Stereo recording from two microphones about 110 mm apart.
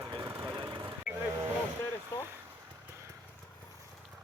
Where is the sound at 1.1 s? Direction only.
10° right (ahead or behind).